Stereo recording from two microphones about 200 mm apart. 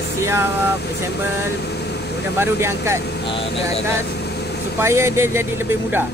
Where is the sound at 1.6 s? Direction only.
55° left (ahead or behind).